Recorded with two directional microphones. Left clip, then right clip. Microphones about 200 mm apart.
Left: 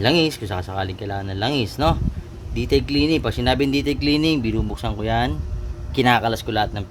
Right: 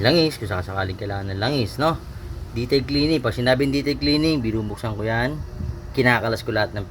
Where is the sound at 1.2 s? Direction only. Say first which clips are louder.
Left 1 dB; 10° left (ahead or behind).